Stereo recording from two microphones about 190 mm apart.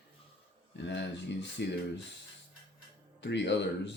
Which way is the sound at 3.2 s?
65° left (ahead or behind).